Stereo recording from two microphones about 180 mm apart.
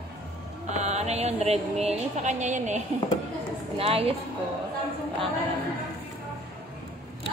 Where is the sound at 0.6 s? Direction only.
40° right (ahead or behind).